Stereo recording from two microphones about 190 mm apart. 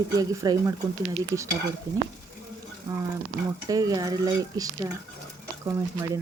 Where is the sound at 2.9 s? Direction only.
20° right (ahead or behind).